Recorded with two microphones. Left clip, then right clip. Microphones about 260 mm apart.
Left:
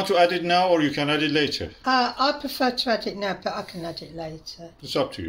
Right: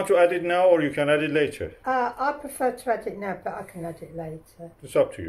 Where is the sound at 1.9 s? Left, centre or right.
Left.